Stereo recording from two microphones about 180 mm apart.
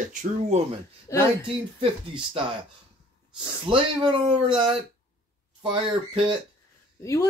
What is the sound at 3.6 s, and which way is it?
Speech, 30° right (ahead or behind).